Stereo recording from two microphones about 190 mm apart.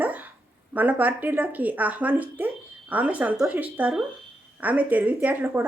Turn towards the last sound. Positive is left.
turn(degrees=-10)  # may be behind; listen again after turning